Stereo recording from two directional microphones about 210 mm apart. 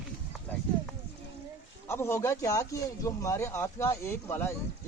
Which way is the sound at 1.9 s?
10° left (ahead or behind).